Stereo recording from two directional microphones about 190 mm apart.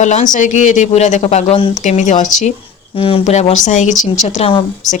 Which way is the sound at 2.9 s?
30° left (ahead or behind).